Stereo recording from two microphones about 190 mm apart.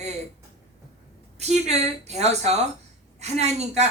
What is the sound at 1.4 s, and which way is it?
Speech, 35° right (ahead or behind).